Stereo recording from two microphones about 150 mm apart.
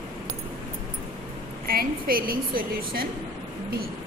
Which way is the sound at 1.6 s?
80° right.